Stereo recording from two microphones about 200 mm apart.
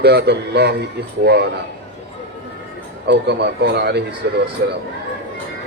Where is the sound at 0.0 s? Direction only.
55° right (ahead or behind).